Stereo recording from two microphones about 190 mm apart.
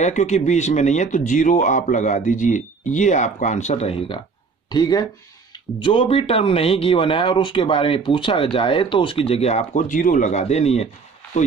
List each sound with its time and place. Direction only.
0.0 s speech: 40° left (ahead or behind)
4.6 s speech: 20° left (ahead or behind)